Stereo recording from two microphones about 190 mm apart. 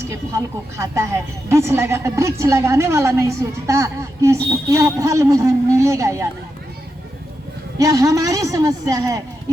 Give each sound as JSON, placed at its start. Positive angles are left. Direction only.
{"t": 0.1, "sound": "speech", "side_deg": -15}
{"t": 7.8, "sound": "speech", "side_deg": -15}